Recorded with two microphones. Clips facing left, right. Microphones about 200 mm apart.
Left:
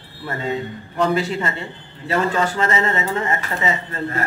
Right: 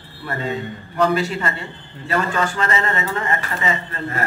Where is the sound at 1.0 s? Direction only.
20° left (ahead or behind).